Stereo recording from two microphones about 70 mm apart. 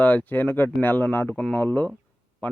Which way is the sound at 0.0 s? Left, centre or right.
Left.